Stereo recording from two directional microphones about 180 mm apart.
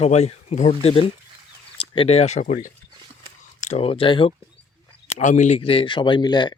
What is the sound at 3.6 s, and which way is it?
Speech, 35° left (ahead or behind).